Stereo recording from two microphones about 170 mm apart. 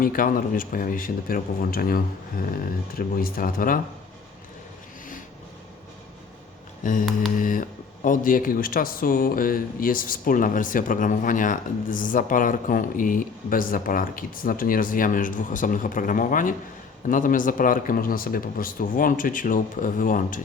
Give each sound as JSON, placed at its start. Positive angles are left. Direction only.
{"t": 0.0, "sound": "speech", "side_deg": 55}
{"t": 6.8, "sound": "speech", "side_deg": 50}